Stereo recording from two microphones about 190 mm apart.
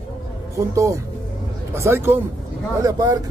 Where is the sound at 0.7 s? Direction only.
15° right (ahead or behind).